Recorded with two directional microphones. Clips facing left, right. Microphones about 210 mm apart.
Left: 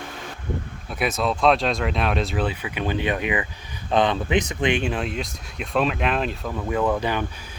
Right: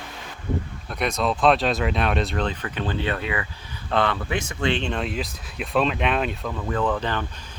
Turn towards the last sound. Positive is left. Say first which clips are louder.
# left 2 dB
turn(degrees=10)  # may be behind; listen again after turning